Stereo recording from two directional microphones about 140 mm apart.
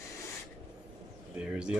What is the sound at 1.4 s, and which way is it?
Speech, 5° right (ahead or behind).